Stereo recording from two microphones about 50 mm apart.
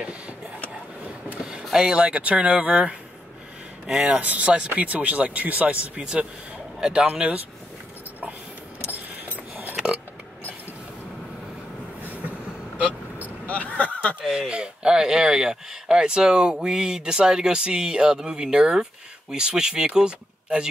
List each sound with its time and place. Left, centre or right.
1.4 s speech: centre
3.8 s speech: centre
4.2 s speech: right
9.2 s a sound: right
12.0 s train: right
13.5 s a sound: left
14.2 s speech: centre
14.5 s speech: centre